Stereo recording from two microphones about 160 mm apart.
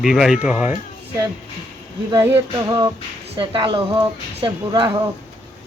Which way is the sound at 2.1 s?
20° right (ahead or behind).